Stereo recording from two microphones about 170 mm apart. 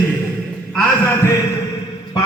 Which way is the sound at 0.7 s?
10° left (ahead or behind).